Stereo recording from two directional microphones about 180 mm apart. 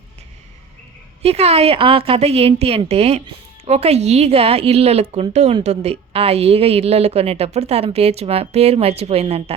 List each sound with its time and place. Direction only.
1.2 s a woman's voice: 35° right (ahead or behind)